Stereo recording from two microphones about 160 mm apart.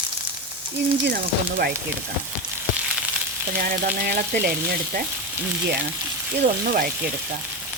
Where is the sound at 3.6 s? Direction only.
75° right (ahead or behind).